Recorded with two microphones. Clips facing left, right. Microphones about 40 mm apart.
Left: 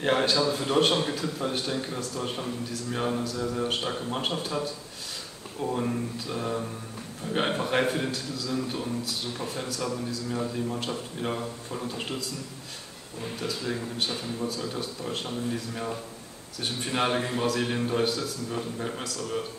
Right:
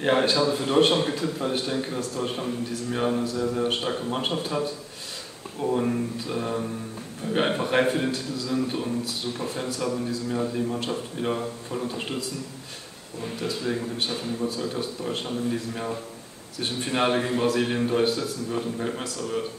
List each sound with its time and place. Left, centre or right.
0.0 s a man's voice: centre
3.3 s a man's voice: right
3.5 s a man's voice: centre
13.7 s a man's voice: centre
19.0 s a man's voice: right